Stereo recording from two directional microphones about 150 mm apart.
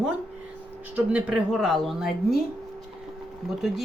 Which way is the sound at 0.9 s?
5° right (ahead or behind).